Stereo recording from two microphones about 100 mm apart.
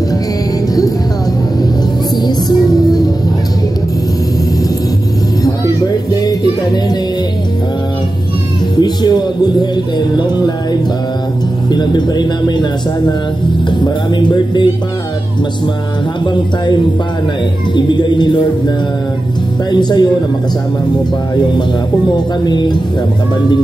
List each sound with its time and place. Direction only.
2.2 s music: 45° left (ahead or behind)
5.4 s music: 40° left (ahead or behind)
8.7 s speech: 45° left (ahead or behind)
11.7 s music: 45° left (ahead or behind)
16.3 s music: 50° left (ahead or behind)
19.7 s music: 45° left (ahead or behind)
22.1 s music: 45° left (ahead or behind)